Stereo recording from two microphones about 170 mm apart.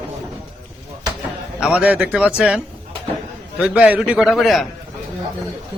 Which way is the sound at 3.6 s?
5° right (ahead or behind).